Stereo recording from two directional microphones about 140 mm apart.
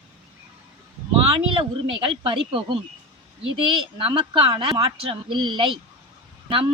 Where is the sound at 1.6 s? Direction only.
35° right (ahead or behind).